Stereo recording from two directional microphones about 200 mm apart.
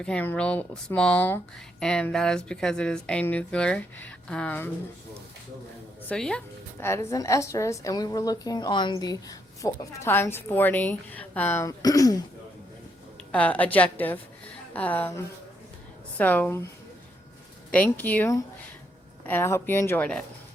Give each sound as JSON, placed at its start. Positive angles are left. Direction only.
{"t": 0.0, "sound": "speech", "side_deg": 5}
{"t": 6.1, "sound": "a woman's voice", "side_deg": 5}
{"t": 13.3, "sound": "a woman's voice", "side_deg": 5}
{"t": 17.7, "sound": "a woman's voice", "side_deg": 10}